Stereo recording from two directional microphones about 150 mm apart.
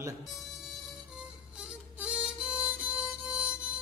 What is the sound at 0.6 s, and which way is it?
Music, 5° right (ahead or behind).